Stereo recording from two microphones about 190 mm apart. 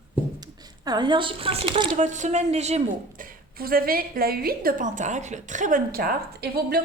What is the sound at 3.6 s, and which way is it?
A woman's voice, 50° right (ahead or behind).